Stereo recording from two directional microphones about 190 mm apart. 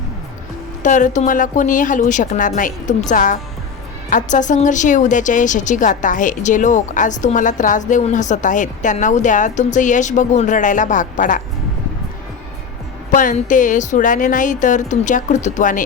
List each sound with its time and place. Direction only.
0.8 s a woman's voice: 40° left (ahead or behind)
13.1 s a woman's voice: 45° left (ahead or behind)